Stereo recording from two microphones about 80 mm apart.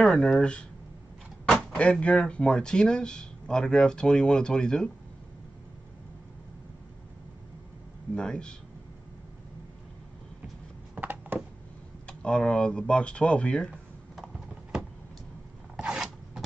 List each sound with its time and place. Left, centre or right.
0.0 s speech: centre
1.8 s speech: centre
8.1 s speech: centre
11.0 s a sound: right
12.1 s speech: centre
14.1 s a sound: centre